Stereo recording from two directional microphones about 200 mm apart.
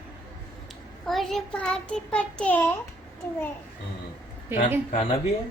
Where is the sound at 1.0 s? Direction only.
Centre (ahead or behind).